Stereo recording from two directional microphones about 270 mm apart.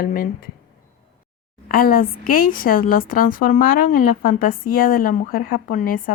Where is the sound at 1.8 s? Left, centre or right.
Left.